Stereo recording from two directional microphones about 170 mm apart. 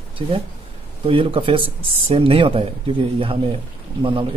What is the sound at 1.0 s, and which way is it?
Speech, 35° right (ahead or behind).